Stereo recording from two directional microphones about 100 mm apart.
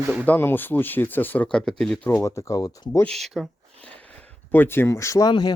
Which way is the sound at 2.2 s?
30° left (ahead or behind).